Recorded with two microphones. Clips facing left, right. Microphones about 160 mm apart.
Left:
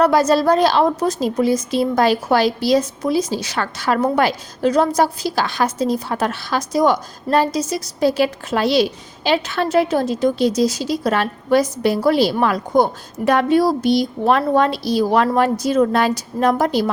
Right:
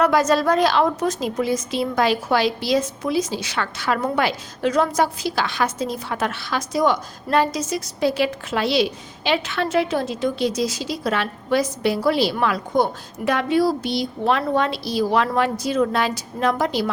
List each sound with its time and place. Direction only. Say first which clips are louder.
0.0 s a woman's voice: left 3 dB; 35° left (ahead or behind)